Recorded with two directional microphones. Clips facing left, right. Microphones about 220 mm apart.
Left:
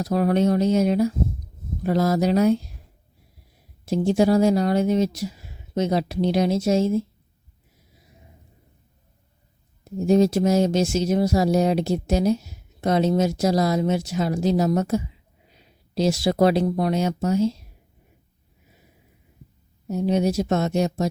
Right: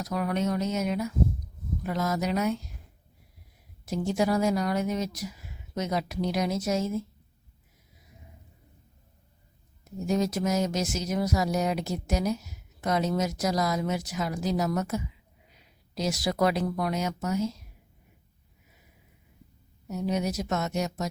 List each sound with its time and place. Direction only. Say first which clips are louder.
0.0 s speech: left 8 dB; 30° left (ahead or behind)
3.8 s speech: left 8 dB; 30° left (ahead or behind)
9.8 s speech: left 9 dB; 30° left (ahead or behind)
19.9 s speech: left 7 dB; 30° left (ahead or behind)